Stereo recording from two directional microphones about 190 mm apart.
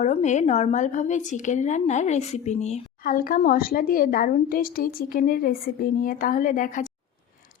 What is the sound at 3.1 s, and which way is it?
A woman's voice, 50° left (ahead or behind).